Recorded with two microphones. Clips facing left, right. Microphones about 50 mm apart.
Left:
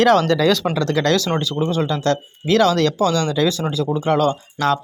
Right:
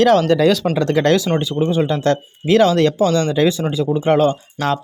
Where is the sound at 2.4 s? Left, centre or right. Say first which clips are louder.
Right 3 dB; centre.